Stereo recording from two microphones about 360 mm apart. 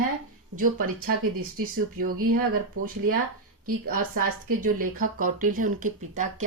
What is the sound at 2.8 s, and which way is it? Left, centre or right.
Speech, right.